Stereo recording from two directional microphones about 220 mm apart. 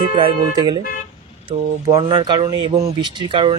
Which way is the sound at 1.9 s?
20° right (ahead or behind).